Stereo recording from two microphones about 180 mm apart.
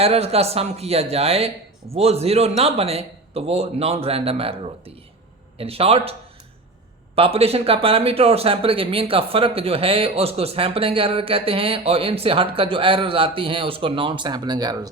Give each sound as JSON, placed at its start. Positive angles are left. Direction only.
{"t": 0.0, "sound": "speech", "side_deg": -35}
{"t": 7.2, "sound": "speech", "side_deg": -35}